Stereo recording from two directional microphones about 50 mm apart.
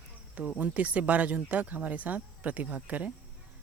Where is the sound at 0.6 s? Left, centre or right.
Right.